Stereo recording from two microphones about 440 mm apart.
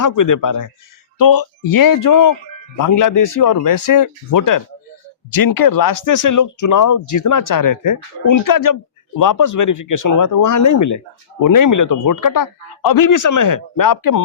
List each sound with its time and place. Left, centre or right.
0.0 s speech: left